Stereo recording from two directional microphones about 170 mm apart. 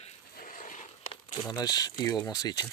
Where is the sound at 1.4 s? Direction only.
25° left (ahead or behind).